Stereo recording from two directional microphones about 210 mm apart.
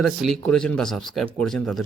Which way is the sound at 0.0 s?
Centre (ahead or behind).